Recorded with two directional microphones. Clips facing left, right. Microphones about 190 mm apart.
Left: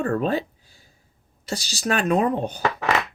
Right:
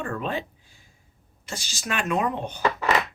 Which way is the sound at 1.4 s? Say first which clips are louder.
Left 7 dB; 35° left (ahead or behind).